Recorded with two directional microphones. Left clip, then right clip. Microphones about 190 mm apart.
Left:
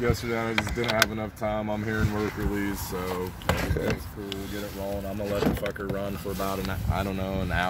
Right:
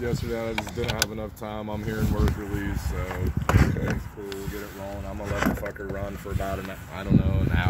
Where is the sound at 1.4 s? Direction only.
25° left (ahead or behind).